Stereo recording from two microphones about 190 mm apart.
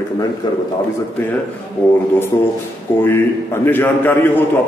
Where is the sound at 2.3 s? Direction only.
15° left (ahead or behind).